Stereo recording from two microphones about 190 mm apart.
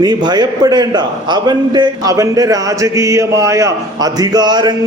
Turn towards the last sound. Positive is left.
turn(degrees=-20)  # may be behind; listen again after turning